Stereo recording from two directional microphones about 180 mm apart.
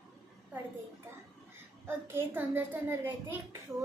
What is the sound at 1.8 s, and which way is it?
Child singing, 10° right (ahead or behind).